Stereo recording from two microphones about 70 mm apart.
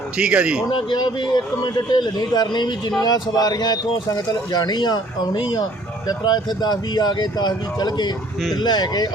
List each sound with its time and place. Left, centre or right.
0.2 s speech: centre
0.9 s a man's voice: left
3.0 s speech: left
6.1 s speech: left